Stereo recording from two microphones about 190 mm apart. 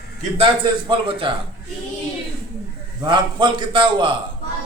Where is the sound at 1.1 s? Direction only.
30° right (ahead or behind).